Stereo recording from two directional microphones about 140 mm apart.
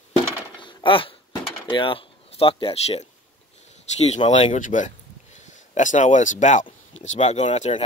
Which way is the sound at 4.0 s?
50° left (ahead or behind).